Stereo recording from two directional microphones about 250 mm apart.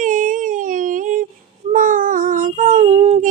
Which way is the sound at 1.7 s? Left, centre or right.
Right.